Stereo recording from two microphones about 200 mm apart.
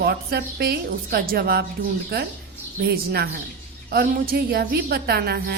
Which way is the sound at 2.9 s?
50° right (ahead or behind).